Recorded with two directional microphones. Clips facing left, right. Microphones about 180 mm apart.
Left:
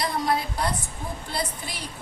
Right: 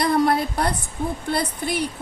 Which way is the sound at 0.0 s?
60° right (ahead or behind).